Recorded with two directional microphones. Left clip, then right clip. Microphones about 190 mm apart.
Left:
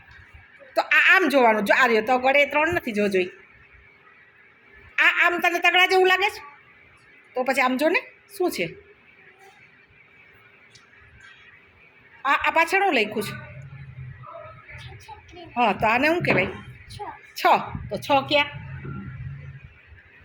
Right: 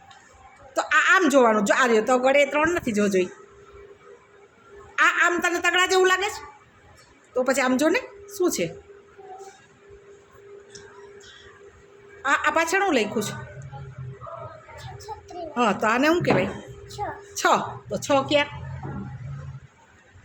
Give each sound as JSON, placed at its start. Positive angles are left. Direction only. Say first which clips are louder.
{"t": 0.7, "sound": "a woman's voice", "louder": "left 2 dB", "side_deg": -10}
{"t": 4.9, "sound": "a woman's voice", "louder": "left 1 dB", "side_deg": -10}
{"t": 12.2, "sound": "a woman's voice", "louder": "left 1 dB", "side_deg": -15}
{"t": 15.5, "sound": "a woman's voice", "louder": "left 1 dB", "side_deg": -15}